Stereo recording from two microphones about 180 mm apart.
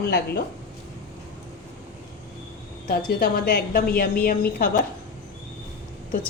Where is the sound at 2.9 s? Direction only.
55° left (ahead or behind).